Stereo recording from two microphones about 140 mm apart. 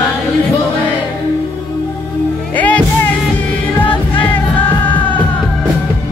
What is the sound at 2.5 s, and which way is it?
Music, 10° left (ahead or behind).